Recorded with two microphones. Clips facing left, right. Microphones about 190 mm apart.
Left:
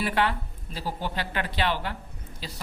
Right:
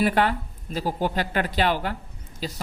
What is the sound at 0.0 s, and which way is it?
A woman's voice, 40° right (ahead or behind).